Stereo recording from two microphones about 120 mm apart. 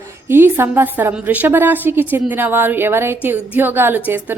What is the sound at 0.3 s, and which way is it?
A woman's voice, 20° right (ahead or behind).